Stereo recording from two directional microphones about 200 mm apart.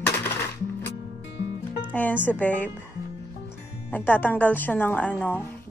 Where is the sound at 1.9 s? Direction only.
10° left (ahead or behind).